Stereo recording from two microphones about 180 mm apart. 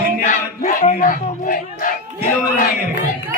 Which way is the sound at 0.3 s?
50° left (ahead or behind).